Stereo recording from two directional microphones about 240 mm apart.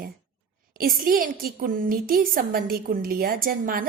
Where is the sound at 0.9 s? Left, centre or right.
Right.